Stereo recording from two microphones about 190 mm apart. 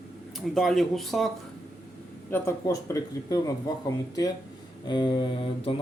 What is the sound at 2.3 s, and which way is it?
Speech, 15° left (ahead or behind).